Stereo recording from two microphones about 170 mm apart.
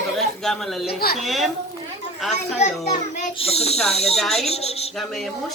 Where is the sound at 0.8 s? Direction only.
65° left (ahead or behind).